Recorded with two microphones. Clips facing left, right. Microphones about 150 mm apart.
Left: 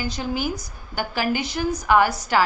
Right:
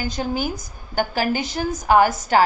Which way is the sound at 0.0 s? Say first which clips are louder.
Right 2 dB; 45° right (ahead or behind).